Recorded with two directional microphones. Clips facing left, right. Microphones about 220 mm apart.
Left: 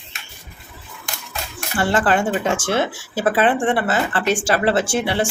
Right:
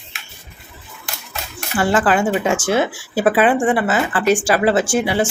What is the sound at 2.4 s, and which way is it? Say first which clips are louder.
Speech: right 3 dB; 10° right (ahead or behind).